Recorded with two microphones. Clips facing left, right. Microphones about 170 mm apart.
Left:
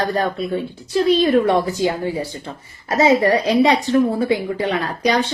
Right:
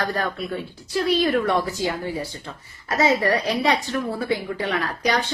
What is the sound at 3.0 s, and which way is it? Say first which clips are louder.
A woman's voice: left 5 dB; 20° left (ahead or behind).